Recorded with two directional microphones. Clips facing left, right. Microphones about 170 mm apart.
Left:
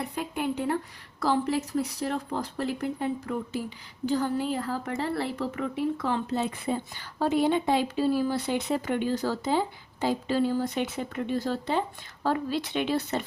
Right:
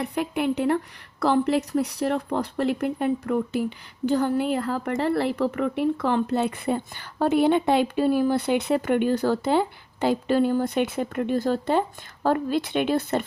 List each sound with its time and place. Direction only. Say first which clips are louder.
0.0 s a woman's voice: right 5 dB; 70° right (ahead or behind); by 13.2 s 55° right (ahead or behind)